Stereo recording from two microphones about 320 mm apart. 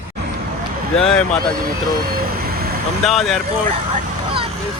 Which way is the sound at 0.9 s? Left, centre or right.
Centre.